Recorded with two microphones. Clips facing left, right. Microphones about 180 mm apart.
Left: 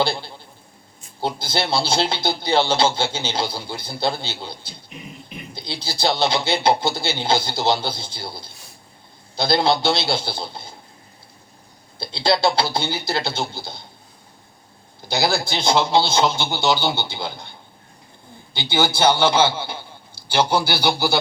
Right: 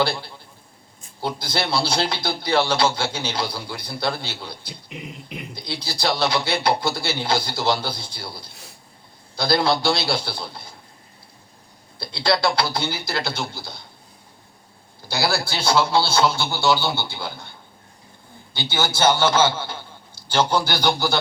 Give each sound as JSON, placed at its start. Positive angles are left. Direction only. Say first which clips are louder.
{"t": 0.0, "sound": "speech", "louder": "left 1 dB", "side_deg": 25}
{"t": 4.9, "sound": "speech", "louder": "right 3 dB", "side_deg": -70}
{"t": 5.8, "sound": "speech", "louder": "left 2 dB", "side_deg": 25}
{"t": 11.9, "sound": "speech", "louder": "left 1 dB", "side_deg": 25}
{"t": 15.0, "sound": "speech", "louder": "left 2 dB", "side_deg": 20}
{"t": 18.5, "sound": "a man's voice", "louder": "left 3 dB", "side_deg": 15}